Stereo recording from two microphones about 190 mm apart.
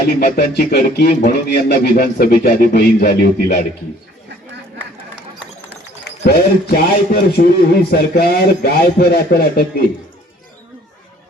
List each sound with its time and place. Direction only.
0.2 s speech: 55° left (ahead or behind)
6.1 s speech: 60° left (ahead or behind)